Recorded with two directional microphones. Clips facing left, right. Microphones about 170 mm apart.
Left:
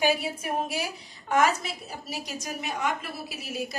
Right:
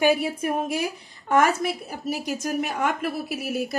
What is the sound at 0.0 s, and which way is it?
A woman's voice, 55° right (ahead or behind).